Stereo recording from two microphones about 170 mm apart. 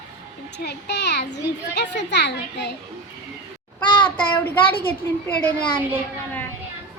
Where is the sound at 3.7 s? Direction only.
10° left (ahead or behind).